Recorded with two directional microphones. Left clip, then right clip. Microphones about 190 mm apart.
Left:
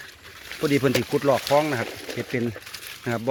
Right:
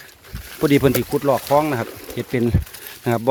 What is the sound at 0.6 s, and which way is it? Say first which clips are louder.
Speech: right 6 dB; 30° right (ahead or behind).